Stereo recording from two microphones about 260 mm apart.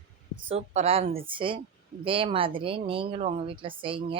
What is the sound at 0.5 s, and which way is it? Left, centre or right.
A woman's voice, right.